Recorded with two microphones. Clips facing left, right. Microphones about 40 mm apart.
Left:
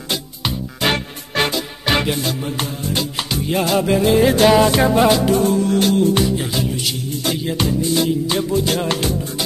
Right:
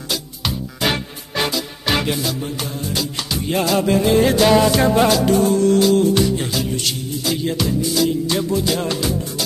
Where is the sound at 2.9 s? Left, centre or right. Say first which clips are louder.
Left 2 dB; left.